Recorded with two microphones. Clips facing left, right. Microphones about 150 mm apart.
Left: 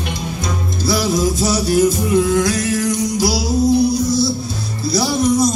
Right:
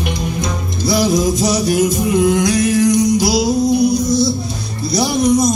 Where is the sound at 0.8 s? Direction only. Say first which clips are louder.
Right 3 dB; 20° right (ahead or behind).